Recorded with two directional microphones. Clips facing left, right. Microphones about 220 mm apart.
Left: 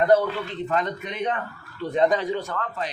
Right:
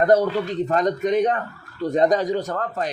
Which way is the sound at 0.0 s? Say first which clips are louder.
Right 2 dB; 40° right (ahead or behind).